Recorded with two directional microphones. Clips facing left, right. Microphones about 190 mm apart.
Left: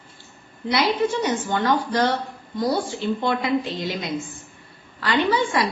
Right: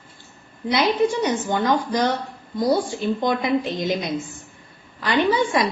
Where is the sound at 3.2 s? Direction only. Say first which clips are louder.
Right 2 dB; 20° right (ahead or behind).